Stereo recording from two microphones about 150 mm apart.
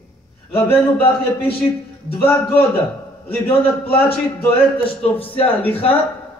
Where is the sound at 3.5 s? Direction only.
40° left (ahead or behind).